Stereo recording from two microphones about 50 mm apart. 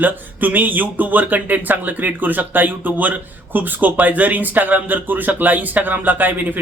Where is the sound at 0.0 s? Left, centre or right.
Right.